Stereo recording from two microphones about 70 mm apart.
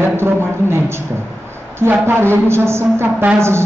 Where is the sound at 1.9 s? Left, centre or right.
Right.